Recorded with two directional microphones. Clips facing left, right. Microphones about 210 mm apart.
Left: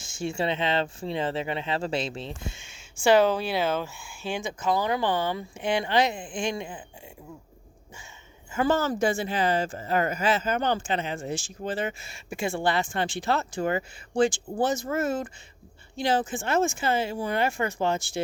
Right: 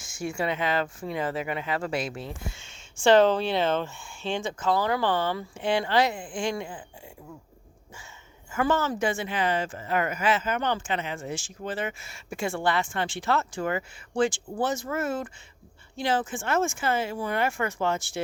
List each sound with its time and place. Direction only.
0.0 s speech: 25° left (ahead or behind)
3.0 s speech: 10° left (ahead or behind)
8.5 s speech: 35° left (ahead or behind)